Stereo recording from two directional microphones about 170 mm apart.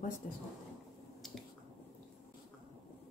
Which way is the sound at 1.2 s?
Centre (ahead or behind).